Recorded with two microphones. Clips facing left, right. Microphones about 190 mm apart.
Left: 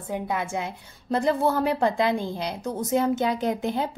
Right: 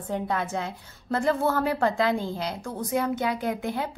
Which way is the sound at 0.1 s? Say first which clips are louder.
Even; 10° left (ahead or behind).